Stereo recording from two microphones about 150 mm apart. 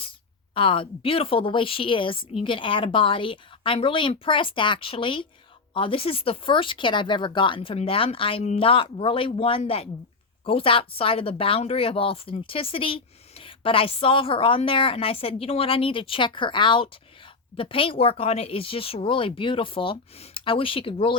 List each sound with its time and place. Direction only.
0.5 s speech: 35° left (ahead or behind)